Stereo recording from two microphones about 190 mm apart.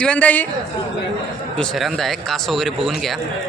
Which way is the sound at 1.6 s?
Centre (ahead or behind).